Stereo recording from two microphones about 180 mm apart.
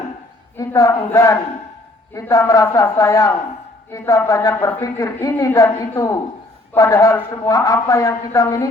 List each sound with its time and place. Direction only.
0.5 s a man's voice: 15° left (ahead or behind)